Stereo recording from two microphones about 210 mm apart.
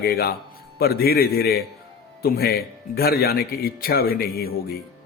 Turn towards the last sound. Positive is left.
turn(degrees=45)  # may be behind; listen again after turning